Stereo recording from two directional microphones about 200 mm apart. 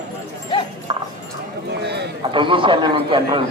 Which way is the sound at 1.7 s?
55° right (ahead or behind).